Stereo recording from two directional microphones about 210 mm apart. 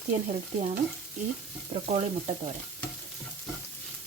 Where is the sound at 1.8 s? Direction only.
30° right (ahead or behind).